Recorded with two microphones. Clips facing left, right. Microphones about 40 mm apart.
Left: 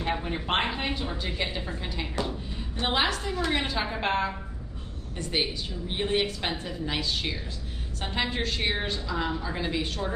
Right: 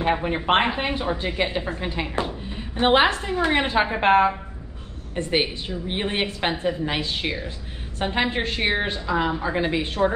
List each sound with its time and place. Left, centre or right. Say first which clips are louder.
0.0 s a woman's voice: right 7 dB; right